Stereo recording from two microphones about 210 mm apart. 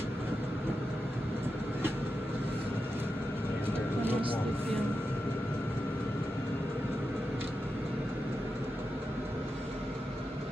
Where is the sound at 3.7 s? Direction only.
10° right (ahead or behind).